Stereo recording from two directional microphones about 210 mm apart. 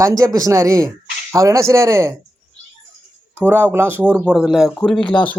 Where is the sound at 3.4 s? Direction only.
10° right (ahead or behind).